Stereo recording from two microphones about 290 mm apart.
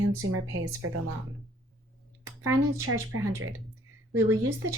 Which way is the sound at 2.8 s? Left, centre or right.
Right.